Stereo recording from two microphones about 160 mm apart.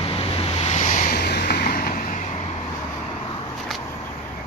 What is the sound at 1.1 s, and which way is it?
Vehicle, 90° left.